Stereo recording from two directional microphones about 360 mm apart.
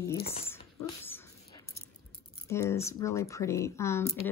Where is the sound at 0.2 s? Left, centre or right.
Centre.